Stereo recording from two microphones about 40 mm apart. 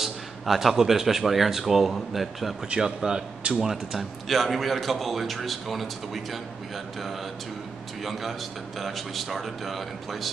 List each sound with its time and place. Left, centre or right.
0.0 s speech: centre
2.8 s speech: centre
3.6 s speech: centre
8.0 s speech: centre